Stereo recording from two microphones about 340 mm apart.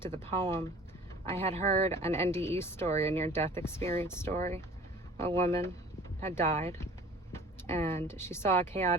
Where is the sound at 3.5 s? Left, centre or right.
Centre.